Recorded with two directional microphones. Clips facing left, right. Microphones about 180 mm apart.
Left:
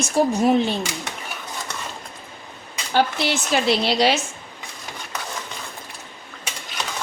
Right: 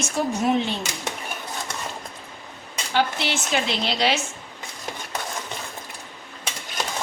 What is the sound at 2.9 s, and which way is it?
A woman's voice, 40° left (ahead or behind).